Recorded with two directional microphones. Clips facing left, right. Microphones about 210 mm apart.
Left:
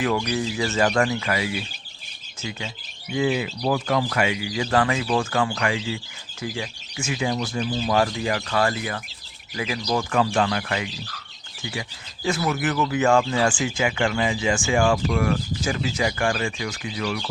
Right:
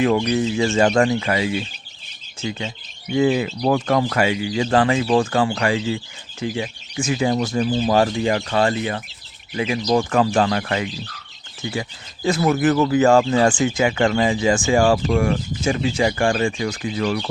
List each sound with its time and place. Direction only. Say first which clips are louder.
0.0 s speech: right 6 dB; 30° right (ahead or behind)